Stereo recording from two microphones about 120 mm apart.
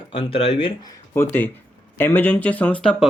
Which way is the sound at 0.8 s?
35° left (ahead or behind).